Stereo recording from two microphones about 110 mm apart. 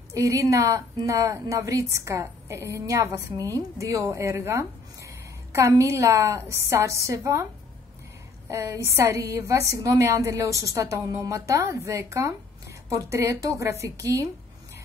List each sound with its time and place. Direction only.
0.1 s a woman's voice: 30° right (ahead or behind)
8.5 s a woman's voice: 25° right (ahead or behind)